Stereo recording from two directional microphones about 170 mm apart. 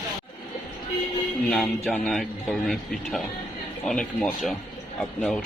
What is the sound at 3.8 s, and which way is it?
Speech, centre (ahead or behind).